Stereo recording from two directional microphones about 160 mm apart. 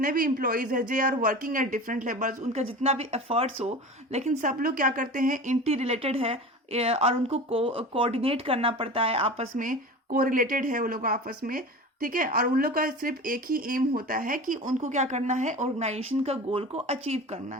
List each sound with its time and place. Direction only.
0.0 s speech: 60° right (ahead or behind)
5.6 s a woman's voice: 40° right (ahead or behind)
9.6 s speech: 60° right (ahead or behind); by 17.4 s 40° right (ahead or behind)